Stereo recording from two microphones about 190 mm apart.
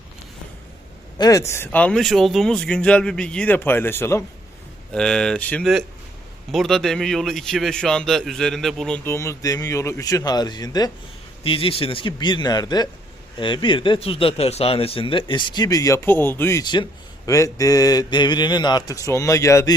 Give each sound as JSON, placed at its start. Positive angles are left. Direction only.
{"t": 1.2, "sound": "a man's voice", "side_deg": 15}
{"t": 9.0, "sound": "speech", "side_deg": 15}